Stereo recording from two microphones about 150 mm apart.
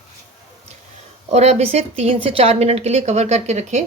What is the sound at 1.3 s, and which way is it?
A woman's voice, 45° right (ahead or behind).